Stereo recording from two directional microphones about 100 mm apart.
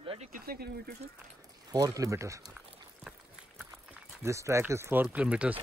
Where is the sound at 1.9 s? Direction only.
30° right (ahead or behind).